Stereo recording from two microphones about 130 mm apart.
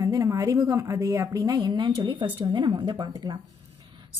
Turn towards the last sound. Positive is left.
turn(degrees=-35)  # may be behind; listen again after turning